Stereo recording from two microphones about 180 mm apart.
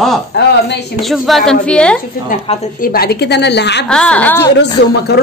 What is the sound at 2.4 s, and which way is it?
Speech, 35° left (ahead or behind).